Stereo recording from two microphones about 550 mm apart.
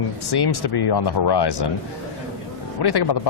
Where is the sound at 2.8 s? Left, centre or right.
Left.